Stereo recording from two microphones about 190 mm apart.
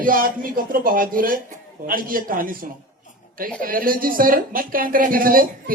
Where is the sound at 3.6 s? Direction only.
50° right (ahead or behind).